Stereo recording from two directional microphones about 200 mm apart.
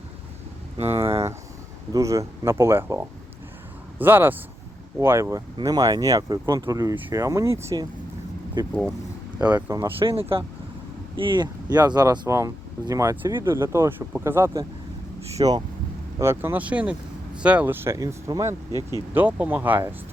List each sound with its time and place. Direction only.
0.8 s speech: 30° right (ahead or behind)
1.9 s speech: 15° right (ahead or behind)
9.5 s speech: 10° right (ahead or behind)
10.0 s speech: 25° right (ahead or behind)
18.7 s speech: 20° left (ahead or behind)
19.1 s speech: 10° right (ahead or behind)